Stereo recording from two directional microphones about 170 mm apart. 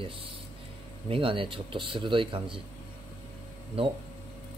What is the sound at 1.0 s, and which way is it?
Speech, 30° right (ahead or behind).